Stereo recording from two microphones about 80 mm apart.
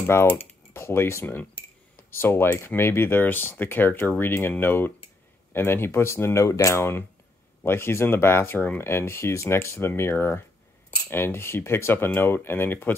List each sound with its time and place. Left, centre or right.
0.0 s speech: left